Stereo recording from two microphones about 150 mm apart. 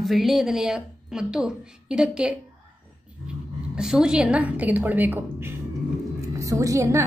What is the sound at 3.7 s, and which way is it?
A woman's voice, 5° right (ahead or behind).